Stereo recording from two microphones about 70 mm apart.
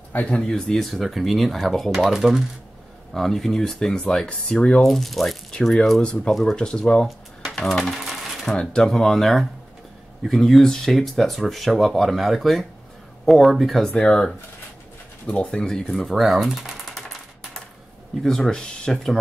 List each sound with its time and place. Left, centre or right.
0.1 s speech: centre
5.9 s speech: centre
7.1 s a sound: centre
8.0 s coin: centre
8.5 s speech: centre
13.8 s speech: centre
15.9 s typewriter: centre
18.2 s speech: centre